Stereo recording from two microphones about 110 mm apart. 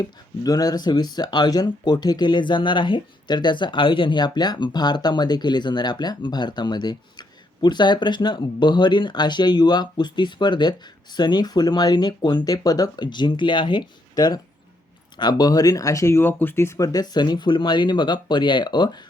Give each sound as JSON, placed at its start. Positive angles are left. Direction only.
{"t": 0.0, "sound": "speech", "side_deg": 35}